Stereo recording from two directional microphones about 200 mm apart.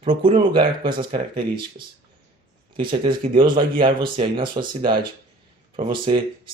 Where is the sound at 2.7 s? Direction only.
25° right (ahead or behind).